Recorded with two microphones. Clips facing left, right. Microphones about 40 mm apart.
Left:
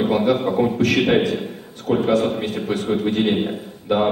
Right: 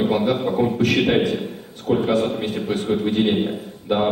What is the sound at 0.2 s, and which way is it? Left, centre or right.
A man's voice, centre.